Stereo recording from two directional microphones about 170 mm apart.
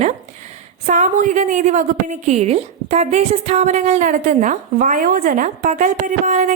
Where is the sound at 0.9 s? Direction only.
45° right (ahead or behind).